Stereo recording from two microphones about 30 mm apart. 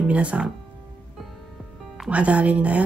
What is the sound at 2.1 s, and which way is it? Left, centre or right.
Speech, right.